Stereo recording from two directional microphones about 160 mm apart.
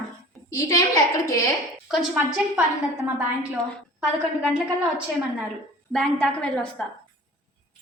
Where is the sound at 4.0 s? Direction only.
5° right (ahead or behind).